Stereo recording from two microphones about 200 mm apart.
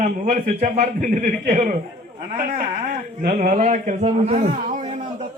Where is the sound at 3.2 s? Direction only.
40° right (ahead or behind).